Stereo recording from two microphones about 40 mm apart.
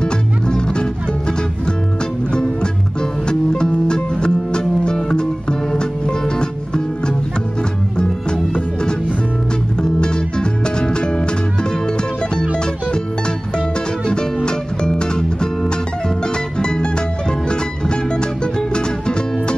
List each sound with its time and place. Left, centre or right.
0.0 s music: left
2.3 s music: left
14.0 s music: left
16.5 s music: left